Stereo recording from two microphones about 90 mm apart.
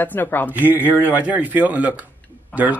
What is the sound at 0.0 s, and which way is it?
Speech, 20° left (ahead or behind).